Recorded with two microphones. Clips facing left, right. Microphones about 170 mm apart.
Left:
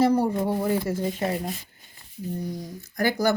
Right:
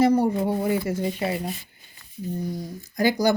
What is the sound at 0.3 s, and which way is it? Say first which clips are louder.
Speech: right 1 dB; 10° right (ahead or behind).